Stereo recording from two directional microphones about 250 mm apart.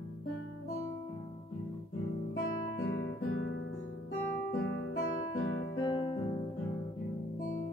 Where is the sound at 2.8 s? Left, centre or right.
Left.